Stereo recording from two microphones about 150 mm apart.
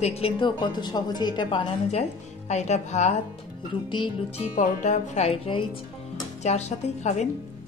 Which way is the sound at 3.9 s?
30° left (ahead or behind).